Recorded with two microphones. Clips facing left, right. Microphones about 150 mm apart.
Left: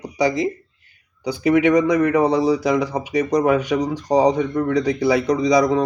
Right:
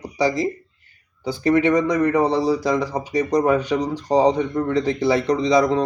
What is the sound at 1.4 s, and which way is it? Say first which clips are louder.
A man's voice: left 2 dB; 15° left (ahead or behind).